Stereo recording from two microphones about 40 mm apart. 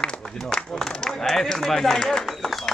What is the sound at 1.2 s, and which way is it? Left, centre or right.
A man's voice, centre.